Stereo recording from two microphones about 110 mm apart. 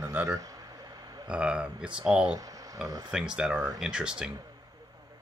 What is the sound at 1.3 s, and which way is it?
Speech, 10° right (ahead or behind).